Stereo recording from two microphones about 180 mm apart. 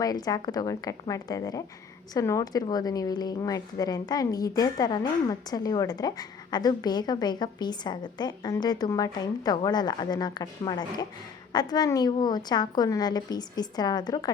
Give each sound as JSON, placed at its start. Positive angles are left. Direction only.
{"t": 0.0, "sound": "a woman's voice", "side_deg": 20}